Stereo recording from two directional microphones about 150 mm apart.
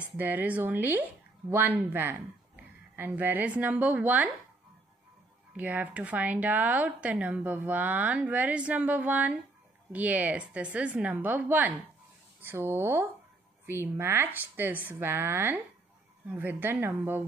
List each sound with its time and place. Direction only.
0.0 s speech: 10° right (ahead or behind)
5.6 s speech: 10° right (ahead or behind)